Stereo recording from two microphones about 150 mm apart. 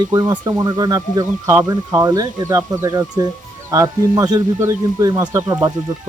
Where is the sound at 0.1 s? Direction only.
25° right (ahead or behind).